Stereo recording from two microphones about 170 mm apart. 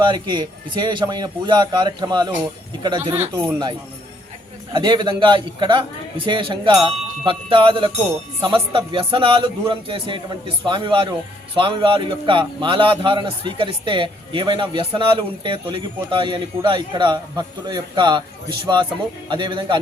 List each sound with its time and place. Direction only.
0.0 s a man's voice: 25° right (ahead or behind)
4.7 s a man's voice: 25° right (ahead or behind)